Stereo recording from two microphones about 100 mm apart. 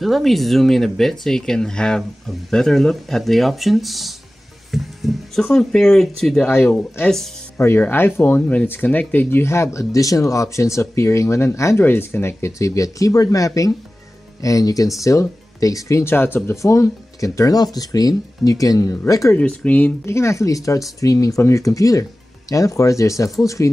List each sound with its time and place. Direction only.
0.0 s speech: centre (ahead or behind)
6.5 s speech: 20° left (ahead or behind)
19.3 s speech: 15° left (ahead or behind)
20.1 s speech: 30° left (ahead or behind)